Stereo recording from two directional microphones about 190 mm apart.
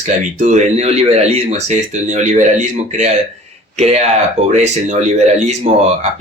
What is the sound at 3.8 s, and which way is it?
Speech, 35° right (ahead or behind).